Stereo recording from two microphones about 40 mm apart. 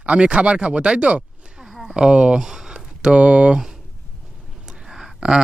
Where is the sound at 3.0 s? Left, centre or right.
Right.